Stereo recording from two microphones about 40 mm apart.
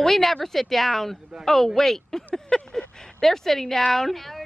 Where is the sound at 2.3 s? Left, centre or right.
Centre.